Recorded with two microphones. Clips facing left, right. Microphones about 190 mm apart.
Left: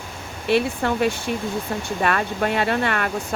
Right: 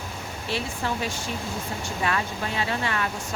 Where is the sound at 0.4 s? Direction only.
60° left (ahead or behind).